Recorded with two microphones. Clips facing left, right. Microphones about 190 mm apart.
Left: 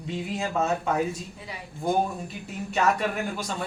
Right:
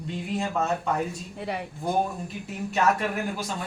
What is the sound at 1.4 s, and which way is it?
Speech, 65° right (ahead or behind).